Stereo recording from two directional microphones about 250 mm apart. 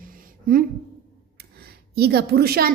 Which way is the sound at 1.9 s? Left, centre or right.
Right.